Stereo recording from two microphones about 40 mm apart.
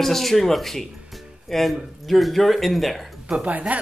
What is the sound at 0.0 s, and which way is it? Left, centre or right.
Speech, centre.